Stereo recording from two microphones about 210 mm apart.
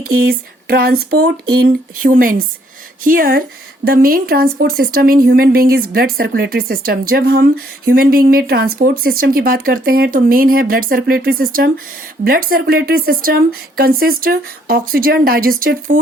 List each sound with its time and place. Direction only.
0.0 s speech: 45° right (ahead or behind)